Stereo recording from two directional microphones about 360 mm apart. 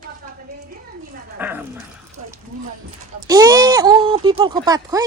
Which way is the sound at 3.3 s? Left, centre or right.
Centre.